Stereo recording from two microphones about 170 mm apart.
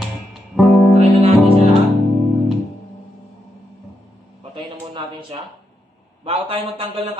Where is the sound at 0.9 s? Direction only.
40° right (ahead or behind).